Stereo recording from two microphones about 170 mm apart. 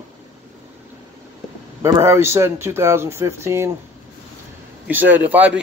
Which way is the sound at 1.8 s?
15° right (ahead or behind).